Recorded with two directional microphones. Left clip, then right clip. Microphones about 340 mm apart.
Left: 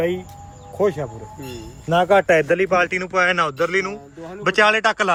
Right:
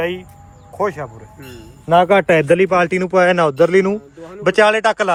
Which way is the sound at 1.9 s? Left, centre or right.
Right.